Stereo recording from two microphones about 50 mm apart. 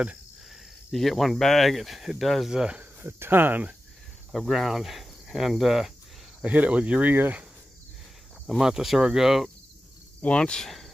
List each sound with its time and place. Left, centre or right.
0.5 s speech: centre
2.5 s speech: centre
3.0 s speech: right
4.3 s cricket: centre
6.4 s cricket: right
7.1 s speech: right
8.5 s speech: centre
10.2 s speech: left
10.6 s speech: centre